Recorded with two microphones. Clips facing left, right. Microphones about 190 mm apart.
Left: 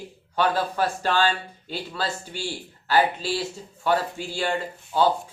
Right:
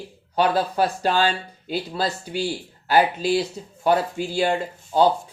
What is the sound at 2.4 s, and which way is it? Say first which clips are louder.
Speech: right 4 dB; 15° right (ahead or behind).